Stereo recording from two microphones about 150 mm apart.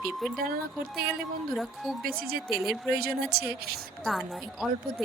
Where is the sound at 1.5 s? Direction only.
Centre (ahead or behind).